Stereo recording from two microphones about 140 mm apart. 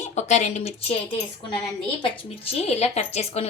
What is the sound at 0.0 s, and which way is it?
Speech, 55° left (ahead or behind).